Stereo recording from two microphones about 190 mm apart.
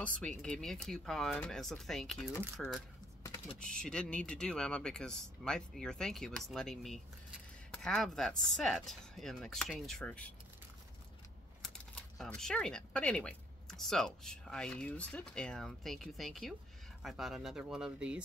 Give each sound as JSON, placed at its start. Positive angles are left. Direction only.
{"t": 0.0, "sound": "speech", "side_deg": 5}
{"t": 11.6, "sound": "speech", "side_deg": 5}